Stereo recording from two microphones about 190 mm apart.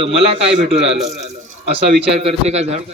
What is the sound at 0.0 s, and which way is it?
Speech, 30° right (ahead or behind).